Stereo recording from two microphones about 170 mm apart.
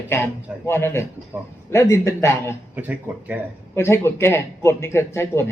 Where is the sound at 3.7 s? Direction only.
15° left (ahead or behind).